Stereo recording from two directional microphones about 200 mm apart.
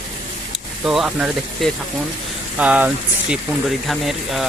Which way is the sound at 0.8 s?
5° right (ahead or behind).